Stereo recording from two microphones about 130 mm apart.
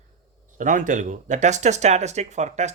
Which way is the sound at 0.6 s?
75° right (ahead or behind).